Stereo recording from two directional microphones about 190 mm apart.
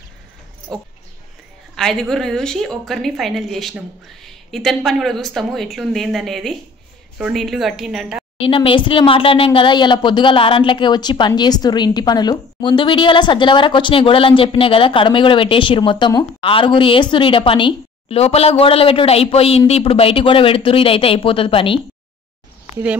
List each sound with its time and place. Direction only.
0.7 s a woman's voice: 5° left (ahead or behind)
8.4 s speech: 30° left (ahead or behind)